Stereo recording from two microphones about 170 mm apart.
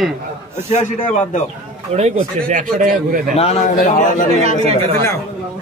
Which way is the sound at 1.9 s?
40° right (ahead or behind).